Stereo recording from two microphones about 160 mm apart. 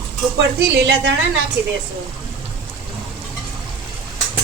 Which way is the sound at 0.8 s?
90° right.